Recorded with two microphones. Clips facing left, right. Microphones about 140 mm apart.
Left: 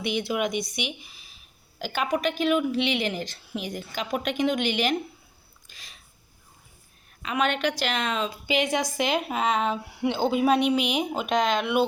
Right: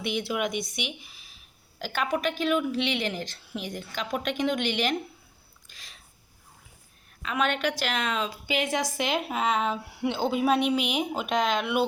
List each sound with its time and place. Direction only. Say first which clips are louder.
0.0 s a woman's voice: left 2 dB; centre (ahead or behind)
7.2 s a woman's voice: left 2 dB; centre (ahead or behind)